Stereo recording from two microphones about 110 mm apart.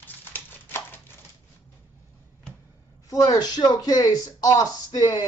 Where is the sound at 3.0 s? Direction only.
30° left (ahead or behind).